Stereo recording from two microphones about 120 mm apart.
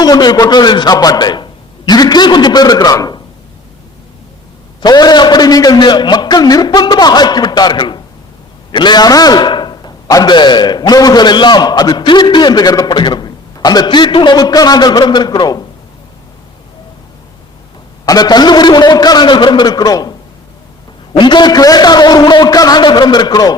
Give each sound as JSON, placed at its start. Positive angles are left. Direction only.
{"t": 0.0, "sound": "a man's voice", "side_deg": 35}
{"t": 4.8, "sound": "a man's voice", "side_deg": 35}
{"t": 18.0, "sound": "a man's voice", "side_deg": 35}